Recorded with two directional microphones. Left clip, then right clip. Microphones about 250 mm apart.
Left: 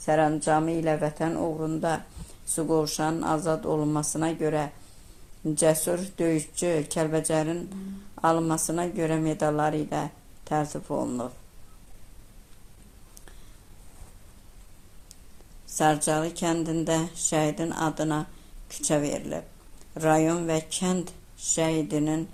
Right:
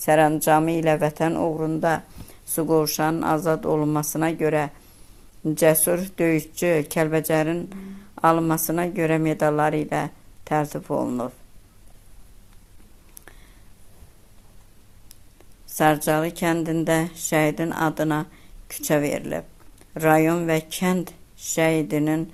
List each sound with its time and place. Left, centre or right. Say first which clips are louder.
0.0 s speech: right 5 dB; right
15.7 s speech: right 4 dB; right